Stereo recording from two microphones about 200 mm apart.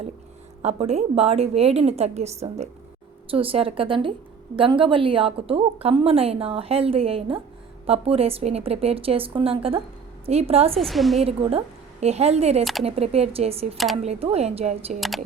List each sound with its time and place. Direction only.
0.6 s a woman's voice: 30° right (ahead or behind)
10.8 s a woman's voice: centre (ahead or behind)
11.2 s a woman's voice: 30° right (ahead or behind)